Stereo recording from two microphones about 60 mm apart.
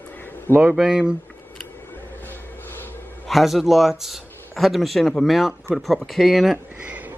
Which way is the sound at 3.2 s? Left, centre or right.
Centre.